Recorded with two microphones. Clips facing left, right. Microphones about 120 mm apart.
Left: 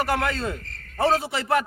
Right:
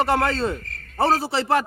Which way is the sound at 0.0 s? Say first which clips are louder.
Right 4 dB; 30° right (ahead or behind).